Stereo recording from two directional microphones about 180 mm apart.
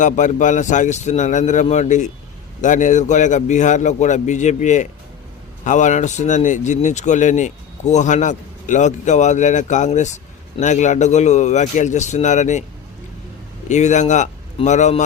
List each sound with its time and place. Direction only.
0.0 s a man's voice: 45° left (ahead or behind)
13.7 s speech: 40° left (ahead or behind)